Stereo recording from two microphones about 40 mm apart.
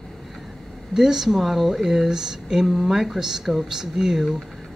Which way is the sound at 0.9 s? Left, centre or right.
Centre.